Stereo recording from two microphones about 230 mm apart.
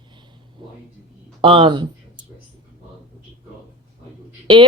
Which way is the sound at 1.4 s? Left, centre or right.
Right.